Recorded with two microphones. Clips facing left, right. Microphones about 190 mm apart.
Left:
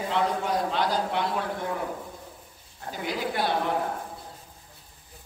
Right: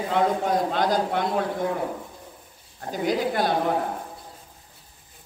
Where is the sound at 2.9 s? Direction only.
45° right (ahead or behind).